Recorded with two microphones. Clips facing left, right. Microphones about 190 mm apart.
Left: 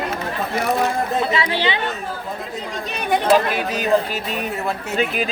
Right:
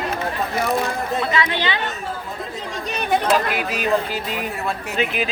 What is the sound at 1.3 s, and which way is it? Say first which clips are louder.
Speech: left 1 dB; 30° left (ahead or behind).